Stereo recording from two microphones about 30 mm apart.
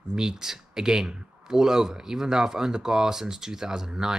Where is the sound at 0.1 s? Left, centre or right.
Right.